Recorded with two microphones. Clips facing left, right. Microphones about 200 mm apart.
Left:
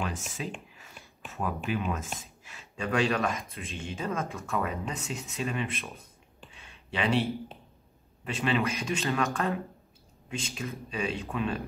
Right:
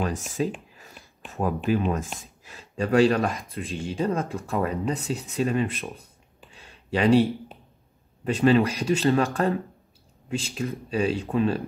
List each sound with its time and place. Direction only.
0.0 s speech: 35° right (ahead or behind)
6.5 s a sound: 35° right (ahead or behind)
8.2 s speech: 35° right (ahead or behind)
10.7 s speech: 35° right (ahead or behind)